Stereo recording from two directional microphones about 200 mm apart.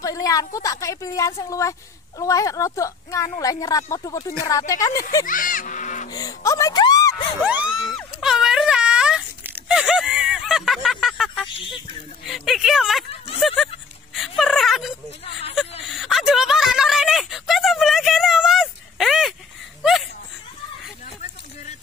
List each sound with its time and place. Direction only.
0.0 s a woman's voice: 15° left (ahead or behind)
5.2 s music: 40° left (ahead or behind)
6.0 s speech: 20° left (ahead or behind)
7.4 s speech: 5° right (ahead or behind)
7.9 s wail: centre (ahead or behind)
11.4 s speech: 25° left (ahead or behind)
12.3 s speech: centre (ahead or behind)
14.1 s whimper: centre (ahead or behind)
15.9 s a sound: centre (ahead or behind)
19.8 s chuckle: centre (ahead or behind)